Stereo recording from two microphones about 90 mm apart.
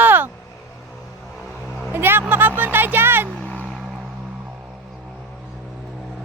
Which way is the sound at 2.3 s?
20° right (ahead or behind).